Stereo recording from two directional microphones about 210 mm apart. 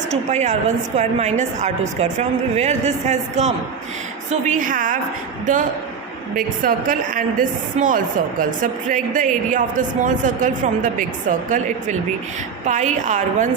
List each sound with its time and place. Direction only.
0.1 s a woman's voice: 35° right (ahead or behind)
6.3 s a woman's voice: 40° right (ahead or behind)